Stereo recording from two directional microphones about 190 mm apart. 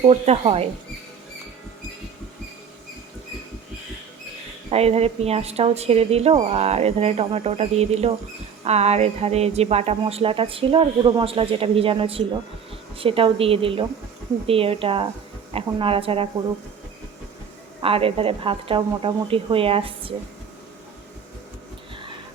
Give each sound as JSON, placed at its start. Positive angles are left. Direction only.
{"t": 0.0, "sound": "speech", "side_deg": -35}
{"t": 4.7, "sound": "a woman's voice", "side_deg": -35}
{"t": 17.8, "sound": "a woman's voice", "side_deg": -30}